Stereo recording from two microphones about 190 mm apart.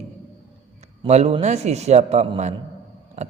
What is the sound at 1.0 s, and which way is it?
Speech, 35° right (ahead or behind).